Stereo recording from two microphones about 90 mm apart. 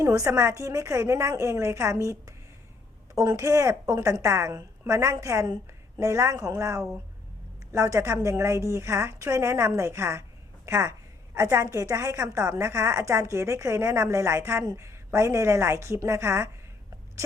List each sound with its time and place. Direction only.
0.0 s a woman's voice: 35° right (ahead or behind)
3.2 s a woman's voice: 35° right (ahead or behind)